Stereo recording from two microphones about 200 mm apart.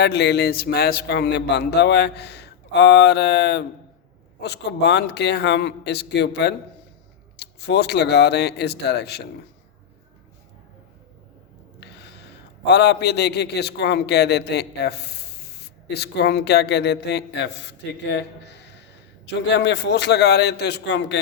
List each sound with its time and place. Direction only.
0.0 s a man's voice: 55° left (ahead or behind)
11.8 s gasp: 55° left (ahead or behind)
12.6 s a man's voice: 55° left (ahead or behind)